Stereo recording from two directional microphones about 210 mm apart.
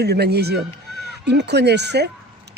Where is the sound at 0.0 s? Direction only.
50° right (ahead or behind).